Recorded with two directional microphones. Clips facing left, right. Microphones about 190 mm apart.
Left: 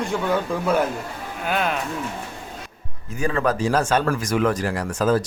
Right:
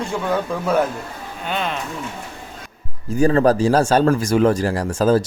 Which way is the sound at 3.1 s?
35° right (ahead or behind).